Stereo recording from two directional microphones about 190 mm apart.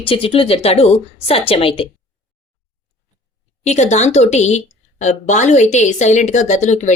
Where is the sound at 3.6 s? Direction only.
35° left (ahead or behind).